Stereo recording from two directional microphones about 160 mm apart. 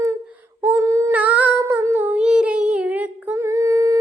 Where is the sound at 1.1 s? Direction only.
10° right (ahead or behind).